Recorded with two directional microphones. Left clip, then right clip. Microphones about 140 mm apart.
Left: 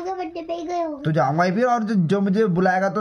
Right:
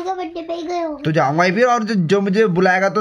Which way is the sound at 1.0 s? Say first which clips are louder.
Right 5 dB; 10° right (ahead or behind).